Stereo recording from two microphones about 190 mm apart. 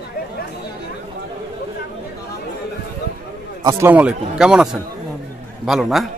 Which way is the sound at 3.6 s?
15° right (ahead or behind).